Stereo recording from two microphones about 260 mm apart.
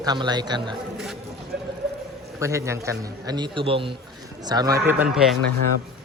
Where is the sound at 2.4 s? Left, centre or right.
Centre.